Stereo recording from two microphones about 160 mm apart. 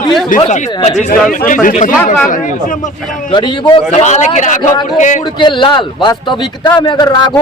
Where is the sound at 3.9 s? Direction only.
45° left (ahead or behind).